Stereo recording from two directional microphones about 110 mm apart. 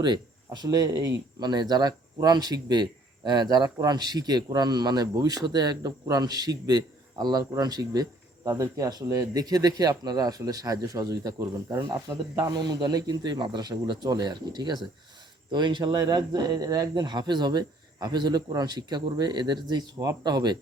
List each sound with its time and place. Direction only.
0.0 s speech: 40° right (ahead or behind)